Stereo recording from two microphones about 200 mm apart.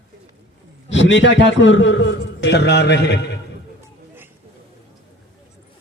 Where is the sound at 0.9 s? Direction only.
65° left (ahead or behind).